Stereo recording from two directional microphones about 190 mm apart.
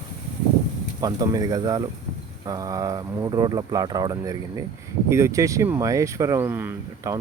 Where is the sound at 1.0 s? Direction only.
20° right (ahead or behind).